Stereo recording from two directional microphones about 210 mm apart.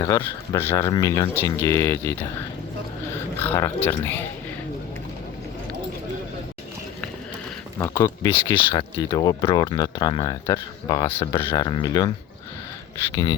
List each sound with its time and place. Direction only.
0.0 s speech: 15° left (ahead or behind)
3.3 s speech: 10° left (ahead or behind)
7.8 s speech: 15° left (ahead or behind)